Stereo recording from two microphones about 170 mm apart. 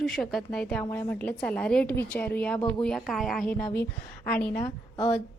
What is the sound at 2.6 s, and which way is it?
Speech, 30° left (ahead or behind).